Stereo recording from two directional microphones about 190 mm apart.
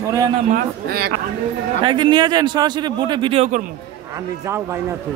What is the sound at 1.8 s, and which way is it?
A man's voice, 25° right (ahead or behind).